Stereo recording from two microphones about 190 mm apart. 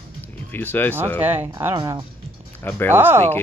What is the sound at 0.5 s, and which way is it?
Speech, 10° left (ahead or behind).